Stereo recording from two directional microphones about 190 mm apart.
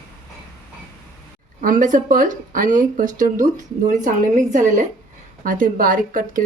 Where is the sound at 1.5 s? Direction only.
45° right (ahead or behind).